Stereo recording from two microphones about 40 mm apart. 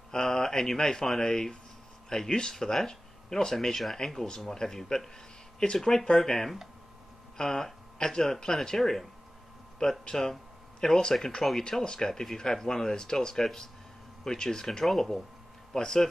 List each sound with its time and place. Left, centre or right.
0.1 s speech: centre
14.9 s speech: centre
15.7 s speech: centre